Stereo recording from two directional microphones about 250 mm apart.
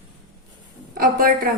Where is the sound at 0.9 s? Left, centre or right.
Right.